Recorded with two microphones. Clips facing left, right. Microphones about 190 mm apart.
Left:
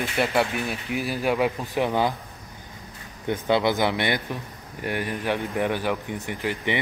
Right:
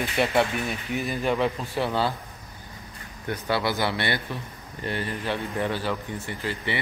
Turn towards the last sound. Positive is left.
turn(degrees=15)  # may be behind; listen again after turning